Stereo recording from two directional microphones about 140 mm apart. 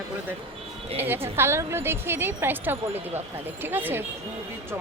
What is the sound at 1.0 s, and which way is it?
Speech, 15° right (ahead or behind).